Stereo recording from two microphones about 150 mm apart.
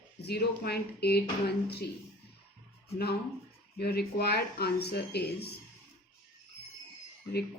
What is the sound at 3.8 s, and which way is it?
Speech, 90° left.